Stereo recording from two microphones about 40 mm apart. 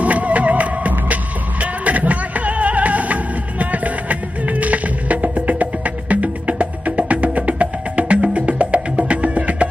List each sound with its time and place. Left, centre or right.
0.0 s music: right